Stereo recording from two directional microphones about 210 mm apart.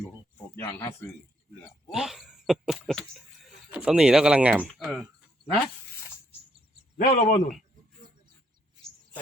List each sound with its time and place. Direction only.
0.5 s a man's voice: 10° left (ahead or behind)
1.9 s speech: centre (ahead or behind)
7.0 s a man's voice: 45° left (ahead or behind)